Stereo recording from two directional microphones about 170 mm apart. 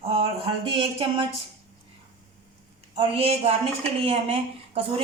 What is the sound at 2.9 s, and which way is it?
Speech, 35° right (ahead or behind).